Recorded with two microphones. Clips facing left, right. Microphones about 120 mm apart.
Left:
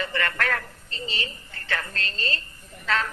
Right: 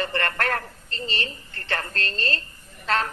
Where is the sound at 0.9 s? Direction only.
65° right (ahead or behind).